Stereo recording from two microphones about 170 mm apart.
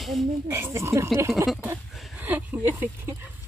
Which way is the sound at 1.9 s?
5° right (ahead or behind).